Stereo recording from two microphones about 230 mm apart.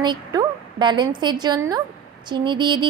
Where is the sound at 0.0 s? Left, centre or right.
Centre.